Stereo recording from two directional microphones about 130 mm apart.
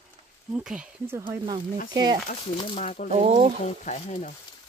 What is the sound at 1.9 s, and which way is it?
Speech, 30° right (ahead or behind).